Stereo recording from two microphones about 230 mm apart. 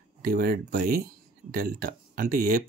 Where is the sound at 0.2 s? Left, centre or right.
Right.